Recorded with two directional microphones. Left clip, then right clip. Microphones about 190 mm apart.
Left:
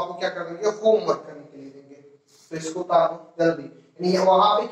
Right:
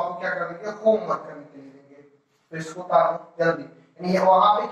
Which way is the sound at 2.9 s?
20° left (ahead or behind).